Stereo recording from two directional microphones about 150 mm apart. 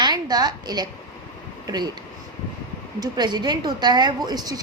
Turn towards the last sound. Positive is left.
turn(degrees=-25)  # may be behind; listen again after turning